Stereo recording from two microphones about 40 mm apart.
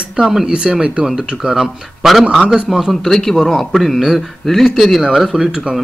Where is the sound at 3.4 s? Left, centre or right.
Centre.